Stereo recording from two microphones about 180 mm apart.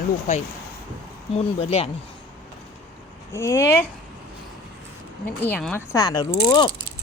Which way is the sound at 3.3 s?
15° left (ahead or behind).